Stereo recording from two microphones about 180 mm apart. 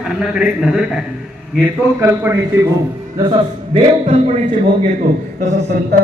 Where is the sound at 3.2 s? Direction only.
25° right (ahead or behind).